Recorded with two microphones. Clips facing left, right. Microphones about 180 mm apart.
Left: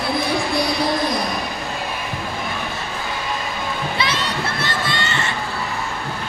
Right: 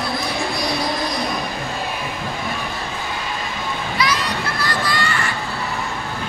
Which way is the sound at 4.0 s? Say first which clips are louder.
Right 4 dB; 25° left (ahead or behind).